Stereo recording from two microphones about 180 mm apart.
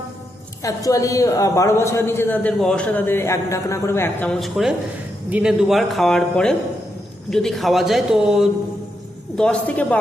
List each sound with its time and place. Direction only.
0.6 s a woman's voice: 20° left (ahead or behind)